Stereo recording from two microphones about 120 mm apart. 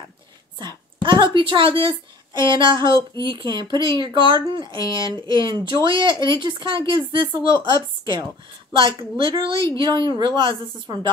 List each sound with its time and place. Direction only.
0.6 s a woman's voice: 40° right (ahead or behind)